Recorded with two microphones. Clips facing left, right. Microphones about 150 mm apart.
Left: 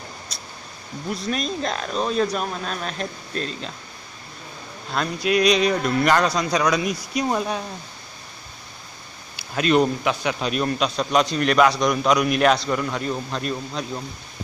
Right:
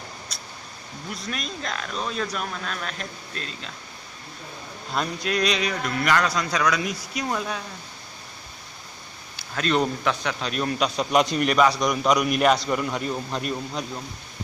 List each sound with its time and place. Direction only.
1.3 s speech: 30° left (ahead or behind)
5.2 s speech: 10° left (ahead or behind)
5.6 s speech: 30° left (ahead or behind)
9.4 s speech: 10° left (ahead or behind)
10.8 s a man's voice: 15° right (ahead or behind)